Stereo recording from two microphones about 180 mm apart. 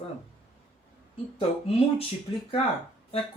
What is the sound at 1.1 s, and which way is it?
Speech, 30° left (ahead or behind).